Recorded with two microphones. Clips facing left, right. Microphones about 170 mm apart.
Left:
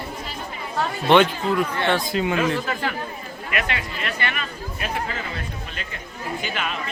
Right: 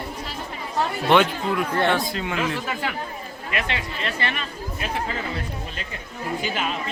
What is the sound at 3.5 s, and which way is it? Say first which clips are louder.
Speech: left 1 dB; 30° right (ahead or behind).